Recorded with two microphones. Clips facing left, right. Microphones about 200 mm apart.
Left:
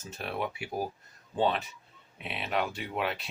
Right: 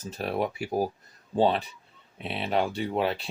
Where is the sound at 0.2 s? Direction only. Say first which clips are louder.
Right 6 dB; 40° right (ahead or behind).